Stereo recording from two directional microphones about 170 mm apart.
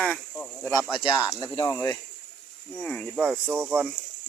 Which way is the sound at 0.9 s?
25° left (ahead or behind).